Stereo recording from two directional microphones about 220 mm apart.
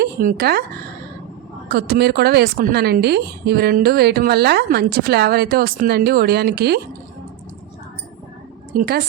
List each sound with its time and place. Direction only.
0.0 s speech: 40° right (ahead or behind)
1.7 s a woman's voice: 45° right (ahead or behind)
8.8 s a woman's voice: 40° right (ahead or behind)